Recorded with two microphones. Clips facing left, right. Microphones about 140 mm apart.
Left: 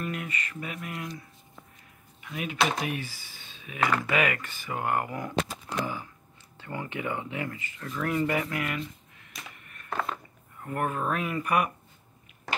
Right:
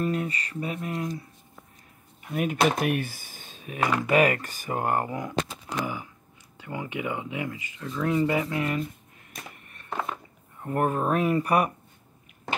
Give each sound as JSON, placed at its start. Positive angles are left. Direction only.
{"t": 0.0, "sound": "speech", "side_deg": -35}
{"t": 2.2, "sound": "speech", "side_deg": -45}
{"t": 3.8, "sound": "speech", "side_deg": -15}
{"t": 4.1, "sound": "speech", "side_deg": -40}
{"t": 5.7, "sound": "a sound", "side_deg": -15}
{"t": 6.6, "sound": "speech", "side_deg": -15}
{"t": 8.8, "sound": "a sound", "side_deg": -45}
{"t": 9.8, "sound": "a sound", "side_deg": -15}
{"t": 10.7, "sound": "speech", "side_deg": -35}